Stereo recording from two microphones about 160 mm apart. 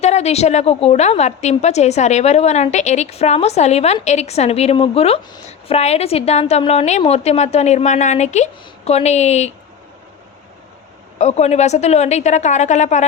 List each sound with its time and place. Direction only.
0.0 s a woman's voice: 40° left (ahead or behind)
11.2 s a woman's voice: 45° left (ahead or behind)